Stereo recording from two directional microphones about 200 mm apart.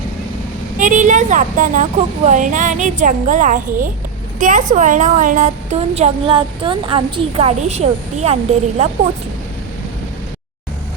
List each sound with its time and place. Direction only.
0.8 s a woman's voice: 40° right (ahead or behind)